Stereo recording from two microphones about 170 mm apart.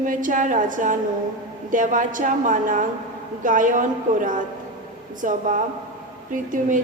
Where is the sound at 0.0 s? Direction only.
50° right (ahead or behind).